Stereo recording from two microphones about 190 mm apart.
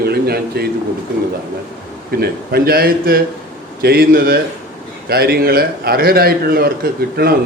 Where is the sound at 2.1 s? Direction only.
55° right (ahead or behind).